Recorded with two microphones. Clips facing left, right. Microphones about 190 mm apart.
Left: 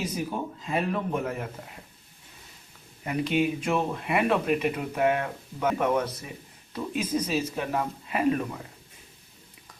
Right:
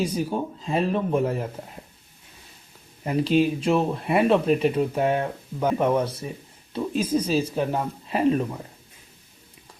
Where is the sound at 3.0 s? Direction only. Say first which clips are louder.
Right 5 dB; 35° right (ahead or behind).